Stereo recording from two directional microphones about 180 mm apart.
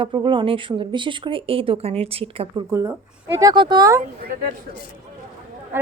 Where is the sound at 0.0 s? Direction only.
25° right (ahead or behind).